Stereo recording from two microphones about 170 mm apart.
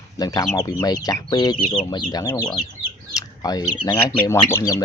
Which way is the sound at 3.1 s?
20° left (ahead or behind).